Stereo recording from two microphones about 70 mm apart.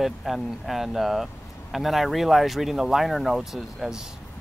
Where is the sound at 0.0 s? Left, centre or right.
Centre.